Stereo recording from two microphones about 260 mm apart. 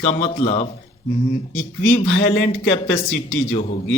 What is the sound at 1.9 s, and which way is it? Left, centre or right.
Speech, left.